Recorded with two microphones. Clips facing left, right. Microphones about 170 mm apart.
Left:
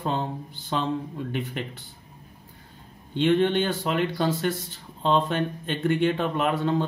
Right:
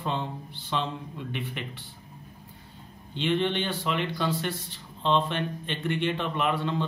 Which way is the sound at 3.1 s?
45° left (ahead or behind).